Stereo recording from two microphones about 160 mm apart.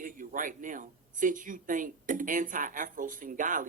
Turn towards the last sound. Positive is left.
turn(degrees=-55)  # may be behind; listen again after turning